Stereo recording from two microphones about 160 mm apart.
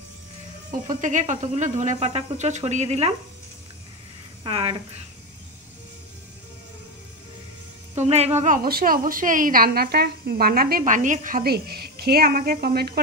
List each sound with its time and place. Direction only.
0.7 s speech: 50° right (ahead or behind)
4.4 s speech: 35° right (ahead or behind)
7.9 s speech: 45° right (ahead or behind)
8.6 s a woman's voice: 65° right (ahead or behind)